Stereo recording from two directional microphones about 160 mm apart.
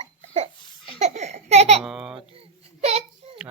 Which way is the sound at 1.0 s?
45° right (ahead or behind).